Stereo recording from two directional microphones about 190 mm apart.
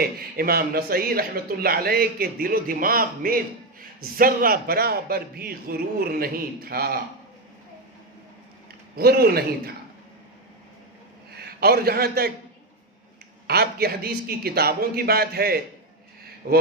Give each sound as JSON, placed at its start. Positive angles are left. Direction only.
{"t": 0.0, "sound": "speech", "side_deg": -50}
{"t": 9.0, "sound": "a man's voice", "side_deg": -55}
{"t": 11.3, "sound": "a man's voice", "side_deg": -55}
{"t": 13.5, "sound": "speech", "side_deg": -55}